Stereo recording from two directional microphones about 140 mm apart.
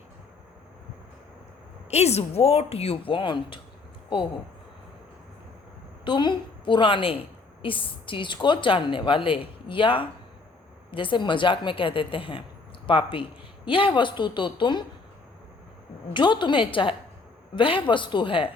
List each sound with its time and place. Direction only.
1.9 s speech: 50° left (ahead or behind)
6.1 s a woman's voice: 35° left (ahead or behind)
16.1 s a woman's voice: 35° left (ahead or behind)